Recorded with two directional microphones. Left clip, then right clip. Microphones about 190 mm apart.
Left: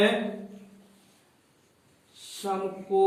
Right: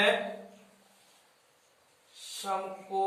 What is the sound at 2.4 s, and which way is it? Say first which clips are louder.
Speech: left 5 dB; 25° right (ahead or behind).